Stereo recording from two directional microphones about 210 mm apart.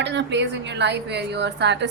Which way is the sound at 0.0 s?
55° right (ahead or behind).